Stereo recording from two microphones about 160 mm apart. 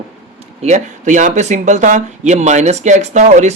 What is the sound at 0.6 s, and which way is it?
Speech, 50° right (ahead or behind).